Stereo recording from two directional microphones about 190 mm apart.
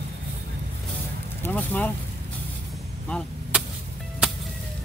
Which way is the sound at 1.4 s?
10° left (ahead or behind).